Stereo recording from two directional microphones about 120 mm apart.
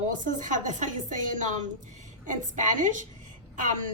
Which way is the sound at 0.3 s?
90° right.